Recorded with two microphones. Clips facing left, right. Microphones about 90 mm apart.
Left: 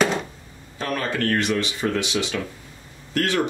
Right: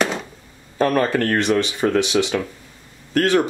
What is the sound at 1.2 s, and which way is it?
Speech, 30° right (ahead or behind).